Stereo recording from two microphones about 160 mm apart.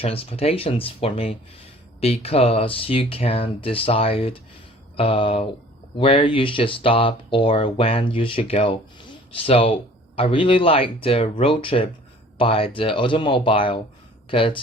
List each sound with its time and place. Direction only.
0.0 s speech: 35° left (ahead or behind)